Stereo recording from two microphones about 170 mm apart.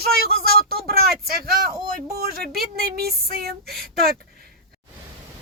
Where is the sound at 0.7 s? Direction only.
65° right (ahead or behind).